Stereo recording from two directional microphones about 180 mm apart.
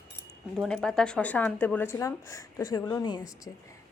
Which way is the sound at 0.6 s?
5° left (ahead or behind).